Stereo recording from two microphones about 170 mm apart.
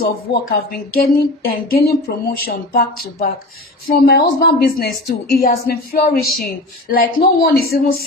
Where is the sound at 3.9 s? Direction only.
65° left (ahead or behind).